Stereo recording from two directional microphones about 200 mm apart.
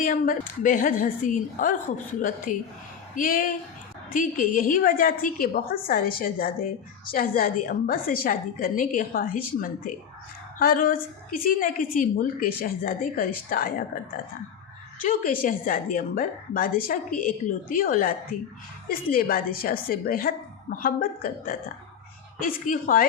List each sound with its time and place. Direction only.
0.0 s a woman's voice: 45° left (ahead or behind)
15.0 s a woman's voice: 45° left (ahead or behind)